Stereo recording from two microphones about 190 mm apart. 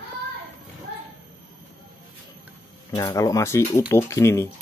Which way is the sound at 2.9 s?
20° left (ahead or behind).